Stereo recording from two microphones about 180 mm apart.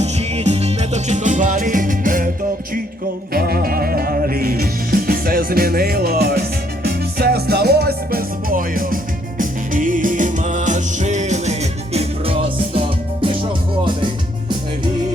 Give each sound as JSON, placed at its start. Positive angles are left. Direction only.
{"t": 0.0, "sound": "music", "side_deg": -35}
{"t": 3.3, "sound": "music", "side_deg": -55}